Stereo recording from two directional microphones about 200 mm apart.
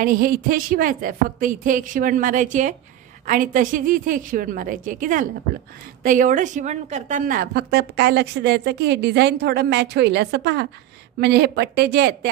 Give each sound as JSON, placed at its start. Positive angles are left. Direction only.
{"t": 0.0, "sound": "a woman's voice", "side_deg": -45}